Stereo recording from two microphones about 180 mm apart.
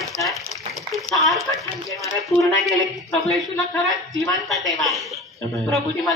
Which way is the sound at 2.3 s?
15° left (ahead or behind).